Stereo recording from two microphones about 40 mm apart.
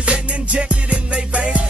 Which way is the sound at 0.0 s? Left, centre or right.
Right.